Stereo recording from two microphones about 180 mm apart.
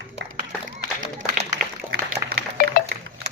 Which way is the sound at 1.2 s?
45° right (ahead or behind).